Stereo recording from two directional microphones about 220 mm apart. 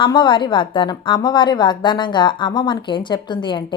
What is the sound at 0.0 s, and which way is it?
A woman's voice, 20° left (ahead or behind).